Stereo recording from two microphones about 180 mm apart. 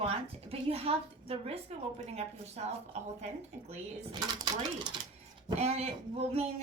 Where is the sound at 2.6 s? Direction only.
35° right (ahead or behind).